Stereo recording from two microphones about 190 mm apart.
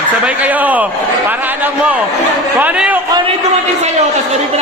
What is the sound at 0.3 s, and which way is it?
A man's voice, 10° right (ahead or behind).